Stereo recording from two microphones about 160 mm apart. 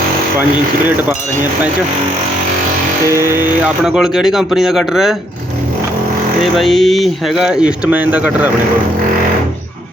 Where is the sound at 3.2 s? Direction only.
15° right (ahead or behind).